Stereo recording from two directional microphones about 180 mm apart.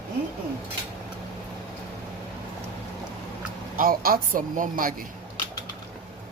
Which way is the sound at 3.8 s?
55° right (ahead or behind).